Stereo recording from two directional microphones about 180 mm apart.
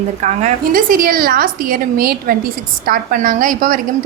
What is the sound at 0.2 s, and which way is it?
Speech, 40° right (ahead or behind).